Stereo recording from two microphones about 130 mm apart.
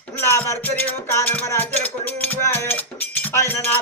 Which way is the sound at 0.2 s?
20° left (ahead or behind).